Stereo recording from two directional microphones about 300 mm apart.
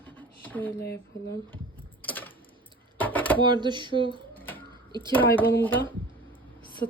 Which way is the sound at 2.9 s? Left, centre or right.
Centre.